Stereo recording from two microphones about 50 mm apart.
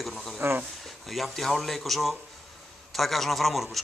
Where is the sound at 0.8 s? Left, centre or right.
Centre.